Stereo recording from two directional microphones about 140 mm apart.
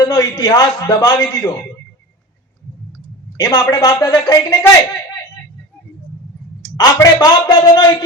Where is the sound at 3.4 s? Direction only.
25° left (ahead or behind).